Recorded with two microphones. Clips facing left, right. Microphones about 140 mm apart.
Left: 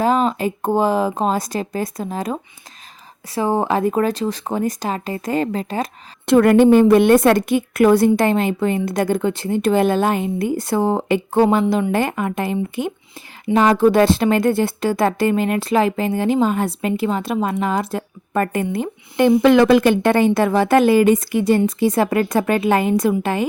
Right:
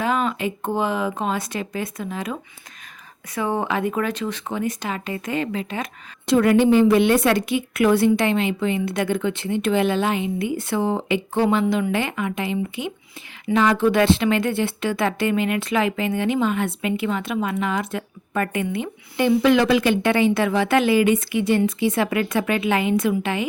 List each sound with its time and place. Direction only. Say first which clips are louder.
0.0 s speech: left 5 dB; 35° left (ahead or behind)
6.2 s a woman's voice: left 5 dB; 55° left (ahead or behind); by 18.9 s 40° left (ahead or behind)
19.4 s a woman's voice: left 5 dB; 50° left (ahead or behind)